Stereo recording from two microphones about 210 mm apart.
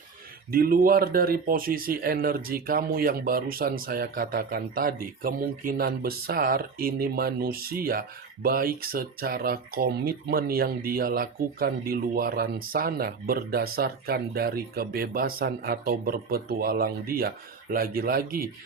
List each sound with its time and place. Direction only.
0.5 s speech: 45° right (ahead or behind)